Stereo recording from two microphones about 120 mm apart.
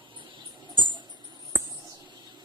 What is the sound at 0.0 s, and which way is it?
Mouse, 45° right (ahead or behind).